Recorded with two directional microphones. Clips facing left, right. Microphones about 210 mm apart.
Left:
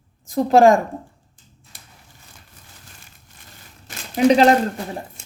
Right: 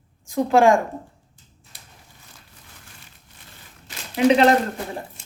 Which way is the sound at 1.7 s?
50° left (ahead or behind).